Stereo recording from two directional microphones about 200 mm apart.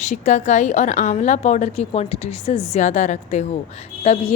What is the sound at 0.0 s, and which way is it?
Speech, 35° left (ahead or behind).